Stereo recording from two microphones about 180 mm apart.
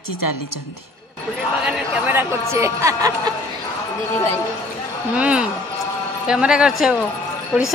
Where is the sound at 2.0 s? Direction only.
15° right (ahead or behind).